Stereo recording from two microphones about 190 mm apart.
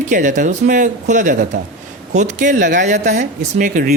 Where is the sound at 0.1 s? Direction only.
40° right (ahead or behind).